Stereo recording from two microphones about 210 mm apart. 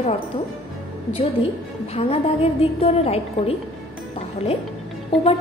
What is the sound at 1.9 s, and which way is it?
A woman's voice, 30° left (ahead or behind).